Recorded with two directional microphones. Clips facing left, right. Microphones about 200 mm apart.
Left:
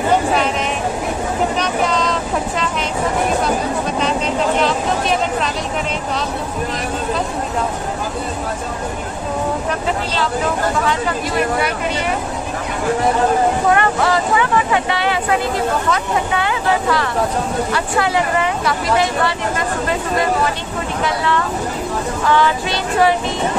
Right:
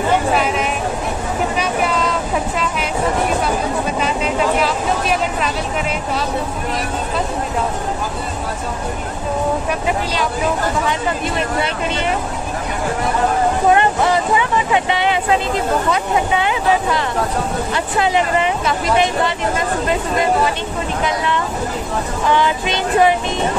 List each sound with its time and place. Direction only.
1.6 s vehicle: 5° right (ahead or behind)
4.6 s speech: 5° right (ahead or behind)
13.7 s speech: 20° right (ahead or behind)
22.2 s speech: 20° right (ahead or behind)